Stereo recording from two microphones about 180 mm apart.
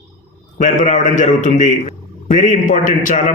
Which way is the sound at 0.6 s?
40° left (ahead or behind).